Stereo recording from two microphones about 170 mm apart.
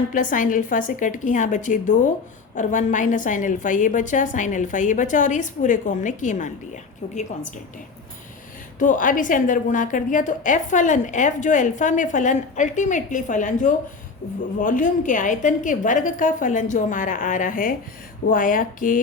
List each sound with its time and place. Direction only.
0.1 s a woman's voice: 50° left (ahead or behind)
8.8 s a woman's voice: 50° left (ahead or behind)